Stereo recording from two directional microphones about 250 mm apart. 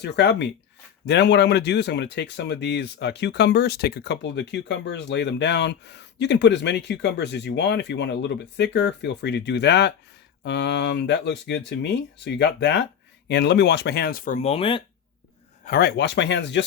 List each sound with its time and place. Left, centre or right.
0.0 s speech: left
15.6 s speech: left